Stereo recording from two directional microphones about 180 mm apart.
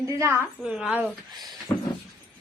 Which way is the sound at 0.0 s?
15° right (ahead or behind).